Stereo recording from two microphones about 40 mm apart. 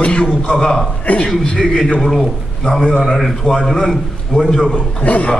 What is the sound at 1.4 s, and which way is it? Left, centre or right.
Speech, centre.